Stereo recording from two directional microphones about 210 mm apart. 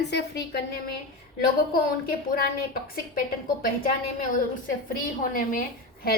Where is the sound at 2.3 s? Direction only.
45° left (ahead or behind).